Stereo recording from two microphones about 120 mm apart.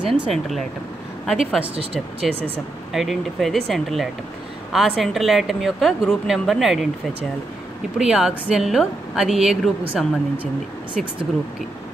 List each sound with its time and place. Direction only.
0.3 s a woman's voice: centre (ahead or behind)
2.1 s speech: 55° right (ahead or behind)
2.9 s a woman's voice: centre (ahead or behind)
8.0 s a woman's voice: 5° right (ahead or behind)
11.0 s a woman's voice: centre (ahead or behind)